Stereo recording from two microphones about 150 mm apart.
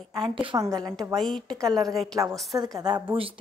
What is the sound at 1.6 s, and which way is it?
Speech, 25° right (ahead or behind).